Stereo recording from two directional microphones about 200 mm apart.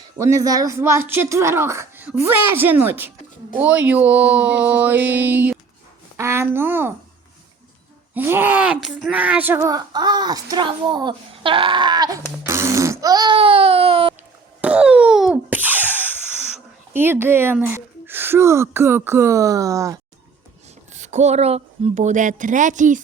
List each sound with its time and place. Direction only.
0.2 s speech: 15° right (ahead or behind)
8.1 s speech: 10° right (ahead or behind); by 14.2 s 25° right (ahead or behind)
14.6 s a sound: 5° right (ahead or behind)
16.9 s speech: 10° right (ahead or behind)
20.9 s a woman's voice: 35° right (ahead or behind)